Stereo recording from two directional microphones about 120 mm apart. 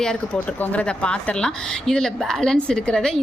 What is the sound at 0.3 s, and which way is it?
A woman's voice, 15° left (ahead or behind).